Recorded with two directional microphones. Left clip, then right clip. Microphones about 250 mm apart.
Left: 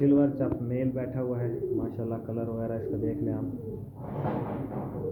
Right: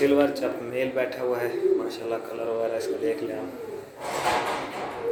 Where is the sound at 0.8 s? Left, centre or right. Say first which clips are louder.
Right 9 dB; centre.